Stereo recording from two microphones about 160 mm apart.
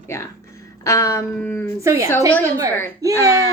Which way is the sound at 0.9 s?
20° left (ahead or behind).